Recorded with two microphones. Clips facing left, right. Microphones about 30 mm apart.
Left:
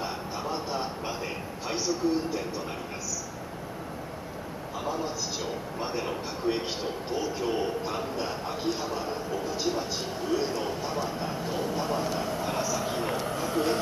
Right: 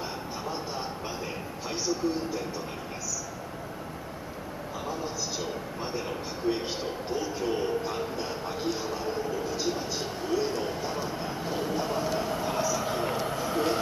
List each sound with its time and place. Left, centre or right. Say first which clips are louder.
0.0 s a sound: left 2 dB; centre
1.7 s speech: left 2 dB; centre
4.8 s a man's voice: left 3 dB; centre